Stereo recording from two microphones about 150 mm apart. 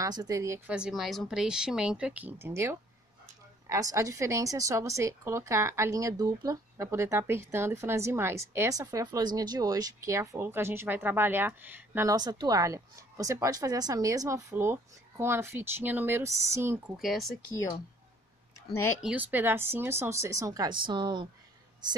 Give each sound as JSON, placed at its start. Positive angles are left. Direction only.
{"t": 0.0, "sound": "a woman's voice", "side_deg": -25}
{"t": 0.7, "sound": "a woman's voice", "side_deg": -5}
{"t": 12.2, "sound": "a woman's voice", "side_deg": -25}
{"t": 17.0, "sound": "speech", "side_deg": 0}
{"t": 18.9, "sound": "a woman's voice", "side_deg": -10}